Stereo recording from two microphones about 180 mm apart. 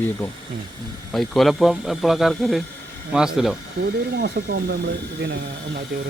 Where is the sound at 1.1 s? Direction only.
Centre (ahead or behind).